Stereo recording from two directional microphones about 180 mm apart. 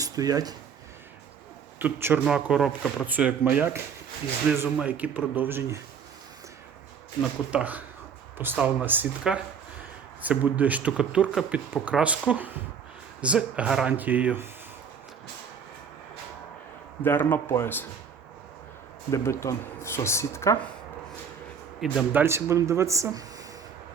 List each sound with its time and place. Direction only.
0.0 s speech: 20° right (ahead or behind)
1.8 s speech: 10° right (ahead or behind)
7.5 s speech: 10° right (ahead or behind)
13.2 s speech: 5° right (ahead or behind)
17.0 s speech: 10° left (ahead or behind)
19.1 s speech: 15° left (ahead or behind)
21.8 s speech: 5° right (ahead or behind)